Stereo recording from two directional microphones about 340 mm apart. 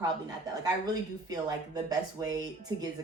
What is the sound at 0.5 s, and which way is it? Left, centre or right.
Speech, centre.